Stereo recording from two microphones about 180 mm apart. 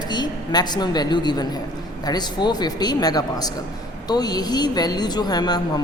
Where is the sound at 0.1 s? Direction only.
25° left (ahead or behind).